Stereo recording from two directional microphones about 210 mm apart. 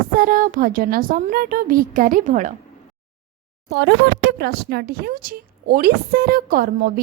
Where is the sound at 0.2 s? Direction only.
40° right (ahead or behind).